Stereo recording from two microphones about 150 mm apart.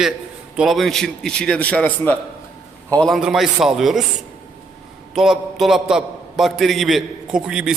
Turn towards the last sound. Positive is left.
turn(degrees=-5)  # may be behind; listen again after turning